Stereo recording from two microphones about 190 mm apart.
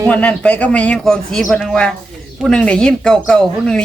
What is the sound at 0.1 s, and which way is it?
Speech, 5° left (ahead or behind).